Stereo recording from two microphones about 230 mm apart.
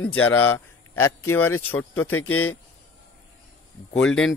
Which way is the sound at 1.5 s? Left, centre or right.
Left.